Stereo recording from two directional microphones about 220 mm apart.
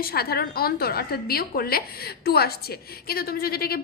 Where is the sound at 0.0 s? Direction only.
45° left (ahead or behind).